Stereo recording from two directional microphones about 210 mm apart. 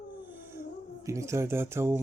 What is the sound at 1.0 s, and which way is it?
Speech, 15° right (ahead or behind).